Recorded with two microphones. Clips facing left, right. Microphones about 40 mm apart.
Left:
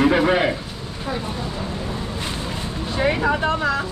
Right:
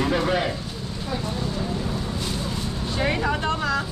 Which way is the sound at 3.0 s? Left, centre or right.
Centre.